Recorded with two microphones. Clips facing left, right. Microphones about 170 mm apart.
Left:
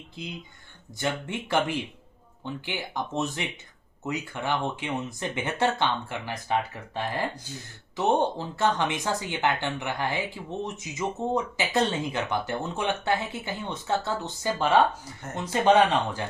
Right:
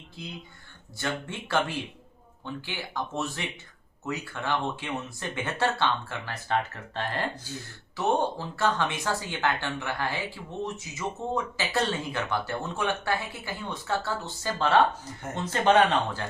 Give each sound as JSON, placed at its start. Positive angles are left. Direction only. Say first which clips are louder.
{"t": 0.2, "sound": "speech", "louder": "left 2 dB", "side_deg": 20}